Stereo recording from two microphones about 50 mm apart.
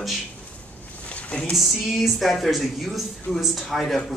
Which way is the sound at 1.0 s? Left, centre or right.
Left.